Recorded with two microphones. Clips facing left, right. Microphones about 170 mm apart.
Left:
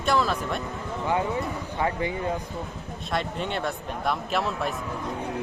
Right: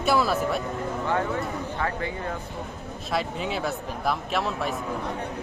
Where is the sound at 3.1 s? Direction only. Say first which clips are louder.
Right 1 dB; 5° right (ahead or behind).